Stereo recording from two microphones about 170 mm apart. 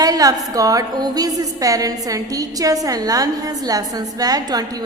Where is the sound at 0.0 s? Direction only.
20° right (ahead or behind).